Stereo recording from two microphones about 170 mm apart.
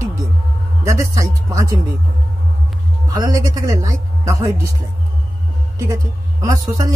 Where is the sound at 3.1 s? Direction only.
20° right (ahead or behind).